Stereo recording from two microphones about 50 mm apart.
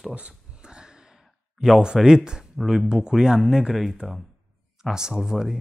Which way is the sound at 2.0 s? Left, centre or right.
Centre.